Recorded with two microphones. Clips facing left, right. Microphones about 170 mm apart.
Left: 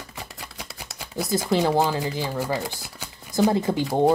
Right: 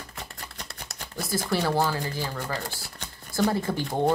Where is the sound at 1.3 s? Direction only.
20° left (ahead or behind).